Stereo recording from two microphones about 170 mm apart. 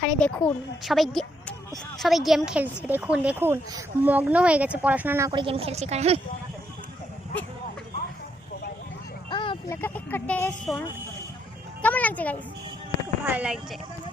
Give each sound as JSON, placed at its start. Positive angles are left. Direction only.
{"t": 0.0, "sound": "speech", "side_deg": 5}
{"t": 5.3, "sound": "a woman's voice", "side_deg": -30}
{"t": 9.3, "sound": "vehicle", "side_deg": 30}
{"t": 9.6, "sound": "speech", "side_deg": 10}
{"t": 11.8, "sound": "a sound", "side_deg": 10}
{"t": 13.2, "sound": "speech", "side_deg": -10}